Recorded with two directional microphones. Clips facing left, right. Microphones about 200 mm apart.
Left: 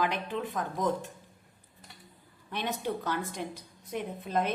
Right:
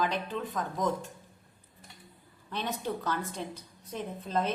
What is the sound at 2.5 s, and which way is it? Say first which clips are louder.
A woman's voice: left 1 dB; 15° left (ahead or behind).